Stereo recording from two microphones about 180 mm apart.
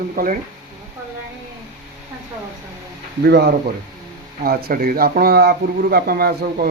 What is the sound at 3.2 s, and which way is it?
Speech, 65° right (ahead or behind).